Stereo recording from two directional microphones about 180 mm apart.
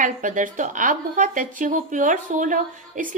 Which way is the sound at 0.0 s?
45° right (ahead or behind).